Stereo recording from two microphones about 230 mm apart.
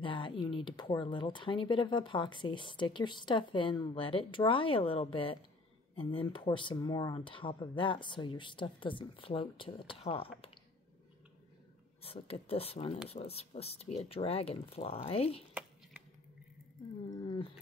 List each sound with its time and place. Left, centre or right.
0.0 s speech: left
12.0 s speech: left
17.1 s speech: centre